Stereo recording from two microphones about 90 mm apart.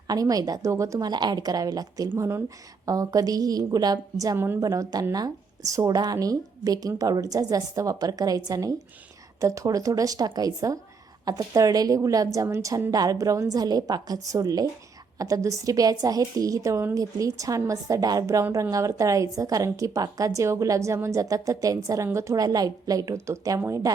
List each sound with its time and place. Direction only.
0.1 s speech: 40° right (ahead or behind)
2.1 s a woman's voice: 30° right (ahead or behind)
2.8 s speech: 40° right (ahead or behind)
4.4 s a woman's voice: 25° right (ahead or behind)
4.6 s a woman's voice: 40° right (ahead or behind)